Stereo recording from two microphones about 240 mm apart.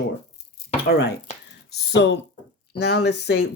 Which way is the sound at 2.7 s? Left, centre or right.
Left.